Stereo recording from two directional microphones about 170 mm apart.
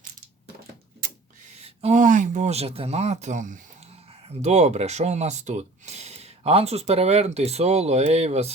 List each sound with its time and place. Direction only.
1.6 s speech: 40° right (ahead or behind)